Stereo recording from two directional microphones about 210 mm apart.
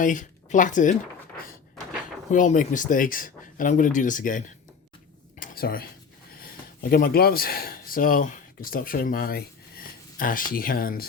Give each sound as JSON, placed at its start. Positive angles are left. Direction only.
{"t": 0.0, "sound": "speech", "side_deg": 40}
{"t": 2.3, "sound": "speech", "side_deg": 40}
{"t": 5.4, "sound": "dishes", "side_deg": 45}
{"t": 6.4, "sound": "speech", "side_deg": 45}